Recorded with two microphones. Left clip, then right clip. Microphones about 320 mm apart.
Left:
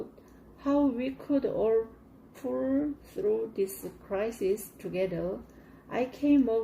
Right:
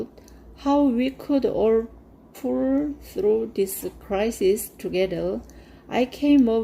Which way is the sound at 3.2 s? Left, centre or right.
Right.